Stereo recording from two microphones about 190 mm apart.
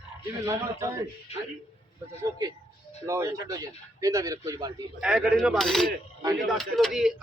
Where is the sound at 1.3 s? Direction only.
35° left (ahead or behind).